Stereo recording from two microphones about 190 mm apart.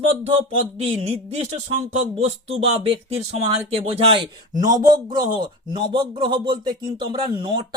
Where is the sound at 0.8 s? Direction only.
35° right (ahead or behind).